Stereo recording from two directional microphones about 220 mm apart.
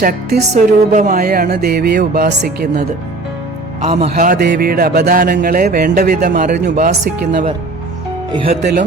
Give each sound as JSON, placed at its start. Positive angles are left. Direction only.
{"t": 0.0, "sound": "music", "side_deg": -40}
{"t": 4.1, "sound": "music", "side_deg": -40}
{"t": 6.7, "sound": "speech", "side_deg": -40}
{"t": 8.3, "sound": "speech", "side_deg": -25}